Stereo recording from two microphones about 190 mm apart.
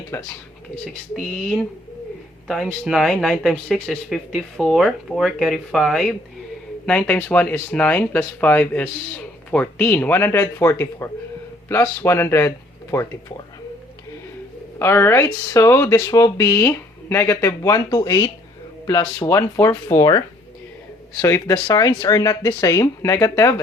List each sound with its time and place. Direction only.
0.1 s speech: 10° left (ahead or behind)
1.1 s speech: centre (ahead or behind)
14.8 s speech: 10° left (ahead or behind)